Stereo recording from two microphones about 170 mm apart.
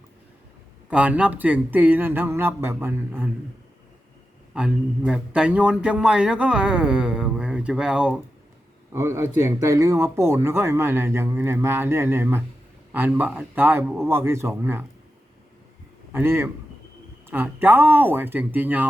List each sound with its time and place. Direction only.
0.9 s speech: 10° right (ahead or behind)
4.5 s a man's voice: 5° right (ahead or behind)
8.9 s speech: 15° right (ahead or behind)
16.1 s speech: 15° right (ahead or behind)